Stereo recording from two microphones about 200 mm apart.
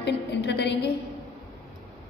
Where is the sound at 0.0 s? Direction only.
55° left (ahead or behind).